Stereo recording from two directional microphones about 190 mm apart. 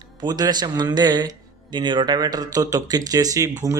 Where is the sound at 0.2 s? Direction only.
20° right (ahead or behind).